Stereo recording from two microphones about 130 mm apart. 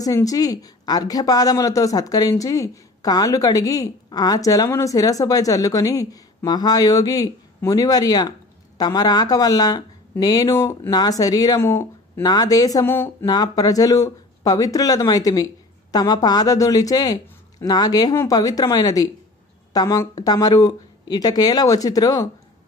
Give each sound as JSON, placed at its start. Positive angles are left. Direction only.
{"t": 0.0, "sound": "a woman's voice", "side_deg": 25}
{"t": 12.2, "sound": "a woman's voice", "side_deg": 30}
{"t": 12.8, "sound": "speech", "side_deg": 15}
{"t": 13.2, "sound": "a woman's voice", "side_deg": 30}